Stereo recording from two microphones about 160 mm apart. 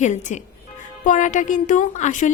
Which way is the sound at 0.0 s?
50° left (ahead or behind).